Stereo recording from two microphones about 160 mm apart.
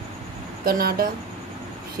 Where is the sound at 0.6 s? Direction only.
70° right (ahead or behind).